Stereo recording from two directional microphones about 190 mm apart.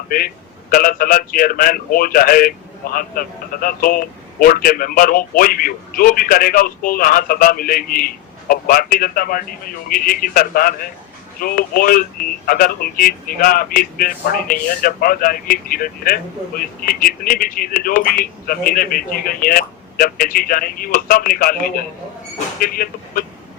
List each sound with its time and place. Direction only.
0.7 s speech: 50° left (ahead or behind)